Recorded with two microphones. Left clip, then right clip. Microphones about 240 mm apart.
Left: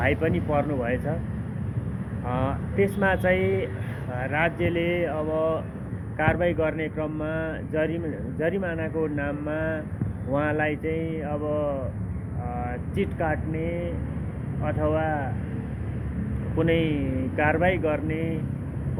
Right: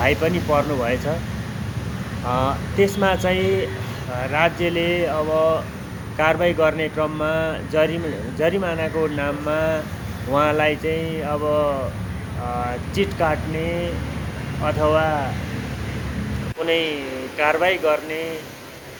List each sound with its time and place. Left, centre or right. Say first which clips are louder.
0.0 s speech: right 5 dB; centre
2.2 s speech: right 7 dB; centre
16.6 s speech: right 5 dB; centre